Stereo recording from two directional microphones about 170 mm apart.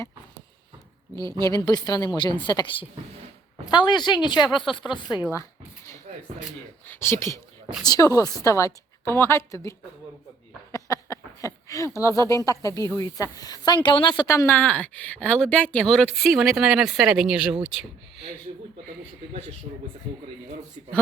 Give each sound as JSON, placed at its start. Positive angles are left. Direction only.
{"t": 1.1, "sound": "a woman's voice", "side_deg": 20}
{"t": 6.8, "sound": "speech", "side_deg": 15}
{"t": 10.7, "sound": "a sound", "side_deg": 20}
{"t": 12.5, "sound": "speech", "side_deg": 20}